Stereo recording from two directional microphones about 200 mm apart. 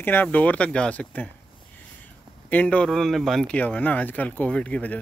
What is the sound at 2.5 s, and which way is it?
Speech, 5° left (ahead or behind).